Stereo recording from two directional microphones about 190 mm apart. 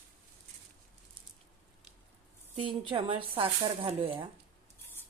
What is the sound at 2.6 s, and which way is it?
Speech, 30° right (ahead or behind).